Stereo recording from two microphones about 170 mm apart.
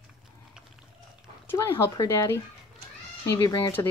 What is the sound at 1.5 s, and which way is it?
Speech, 15° left (ahead or behind).